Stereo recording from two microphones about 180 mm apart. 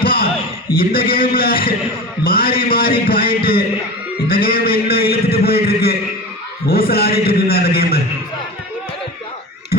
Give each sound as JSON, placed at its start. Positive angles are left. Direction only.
{"t": 0.0, "sound": "a sound", "side_deg": 55}
{"t": 0.8, "sound": "a man's voice", "side_deg": 55}
{"t": 4.3, "sound": "a man's voice", "side_deg": 55}